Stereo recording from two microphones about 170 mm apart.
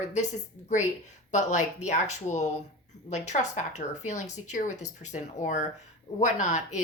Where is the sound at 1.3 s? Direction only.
45° left (ahead or behind).